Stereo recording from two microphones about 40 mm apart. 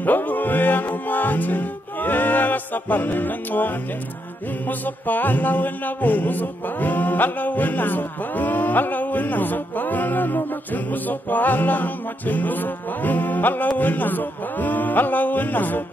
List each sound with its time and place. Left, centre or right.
0.0 s music: left